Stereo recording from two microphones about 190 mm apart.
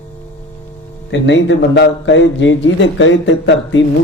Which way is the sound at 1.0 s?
70° left (ahead or behind).